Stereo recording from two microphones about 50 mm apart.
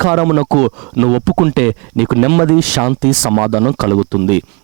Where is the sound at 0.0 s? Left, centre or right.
Right.